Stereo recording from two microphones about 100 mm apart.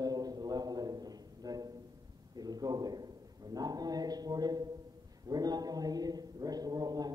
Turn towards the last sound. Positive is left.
turn(degrees=-40)  # may be behind; listen again after turning